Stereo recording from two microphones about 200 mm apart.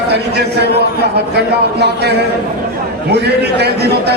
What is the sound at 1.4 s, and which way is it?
A man's voice, 55° right (ahead or behind).